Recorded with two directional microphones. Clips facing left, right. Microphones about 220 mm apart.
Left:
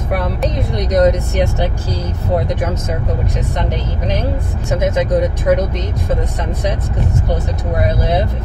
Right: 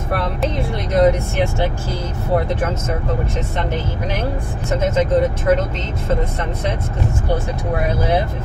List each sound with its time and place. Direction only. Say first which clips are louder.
0.1 s speech: left 2 dB; 15° left (ahead or behind)
4.6 s speech: left 1 dB; 15° left (ahead or behind)